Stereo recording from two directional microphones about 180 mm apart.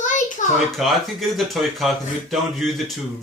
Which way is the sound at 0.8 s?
Centre (ahead or behind).